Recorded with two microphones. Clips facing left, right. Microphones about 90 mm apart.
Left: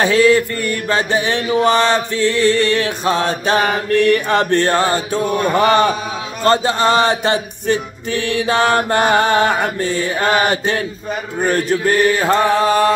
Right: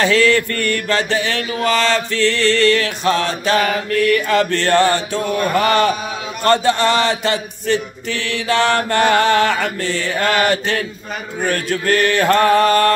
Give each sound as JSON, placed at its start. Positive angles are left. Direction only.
{"t": 0.0, "sound": "mantra", "side_deg": 15}